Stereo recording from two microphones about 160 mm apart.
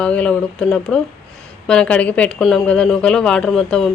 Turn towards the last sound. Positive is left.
turn(degrees=5)  # may be behind; listen again after turning